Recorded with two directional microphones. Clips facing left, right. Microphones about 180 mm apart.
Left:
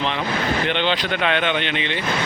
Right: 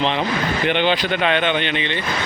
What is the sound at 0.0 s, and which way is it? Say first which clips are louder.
Speech: right 4 dB; 25° right (ahead or behind).